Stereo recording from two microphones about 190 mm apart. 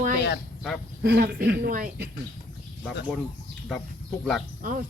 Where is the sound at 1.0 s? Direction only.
55° right (ahead or behind).